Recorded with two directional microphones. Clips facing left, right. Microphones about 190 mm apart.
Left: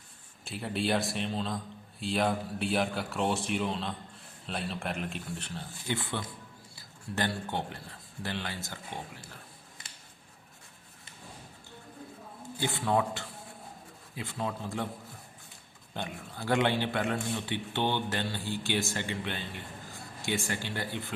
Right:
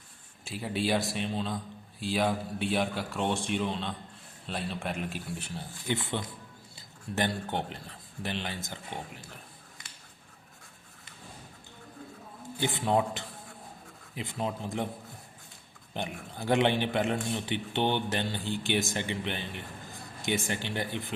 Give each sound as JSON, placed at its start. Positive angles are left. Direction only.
{"t": 0.4, "sound": "a man's voice", "side_deg": 0}
{"t": 5.9, "sound": "a man's voice", "side_deg": -20}
{"t": 12.5, "sound": "a man's voice", "side_deg": -20}
{"t": 16.0, "sound": "a man's voice", "side_deg": -20}